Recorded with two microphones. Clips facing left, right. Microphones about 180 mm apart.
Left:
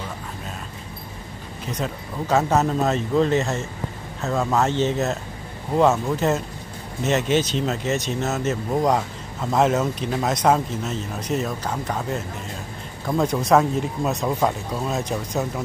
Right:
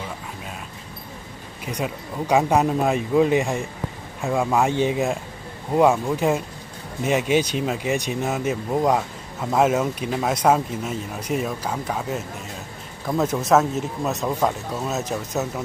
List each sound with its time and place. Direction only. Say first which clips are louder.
1.7 s speech: right 1 dB; 10° right (ahead or behind)